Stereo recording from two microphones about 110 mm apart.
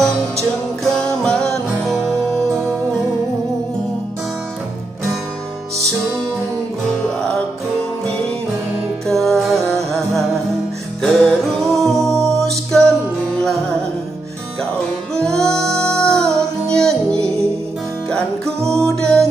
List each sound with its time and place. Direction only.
0.8 s music: 5° left (ahead or behind)
9.1 s music: centre (ahead or behind)
9.7 s music: 25° right (ahead or behind)
11.0 s music: 5° left (ahead or behind)
15.1 s music: 5° left (ahead or behind)
18.7 s music: 5° left (ahead or behind)